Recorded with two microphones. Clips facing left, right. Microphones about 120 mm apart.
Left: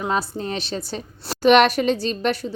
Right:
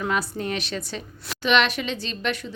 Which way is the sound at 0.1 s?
30° left (ahead or behind).